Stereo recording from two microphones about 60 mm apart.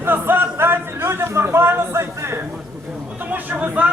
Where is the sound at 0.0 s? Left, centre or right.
Right.